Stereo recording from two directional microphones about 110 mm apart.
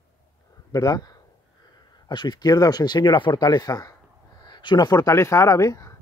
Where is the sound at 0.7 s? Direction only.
35° left (ahead or behind).